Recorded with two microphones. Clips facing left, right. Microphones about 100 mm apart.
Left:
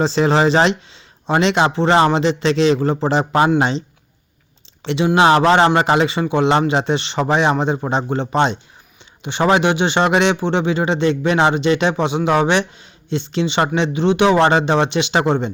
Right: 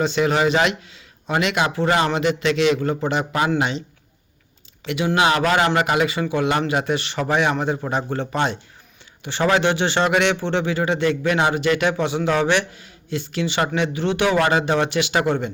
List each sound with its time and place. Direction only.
0.0 s a man's voice: 30° left (ahead or behind)